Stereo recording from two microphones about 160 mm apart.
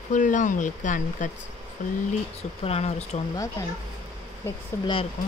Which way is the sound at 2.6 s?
40° left (ahead or behind).